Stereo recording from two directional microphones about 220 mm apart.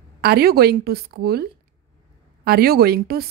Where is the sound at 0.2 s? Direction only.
45° right (ahead or behind).